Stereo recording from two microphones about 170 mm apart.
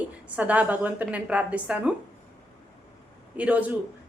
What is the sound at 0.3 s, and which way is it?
A woman's voice, 10° right (ahead or behind).